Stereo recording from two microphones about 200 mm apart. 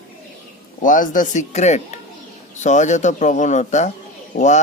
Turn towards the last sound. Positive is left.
turn(degrees=35)  # may be behind; listen again after turning